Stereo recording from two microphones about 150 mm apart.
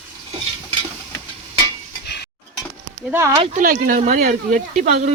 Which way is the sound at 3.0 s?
15° right (ahead or behind).